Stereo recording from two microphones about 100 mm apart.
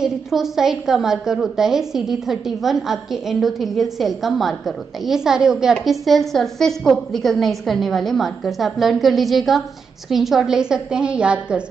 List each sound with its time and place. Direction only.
0.0 s a woman's voice: 5° right (ahead or behind)